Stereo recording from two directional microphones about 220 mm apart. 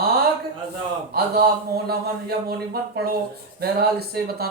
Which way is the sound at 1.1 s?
45° right (ahead or behind).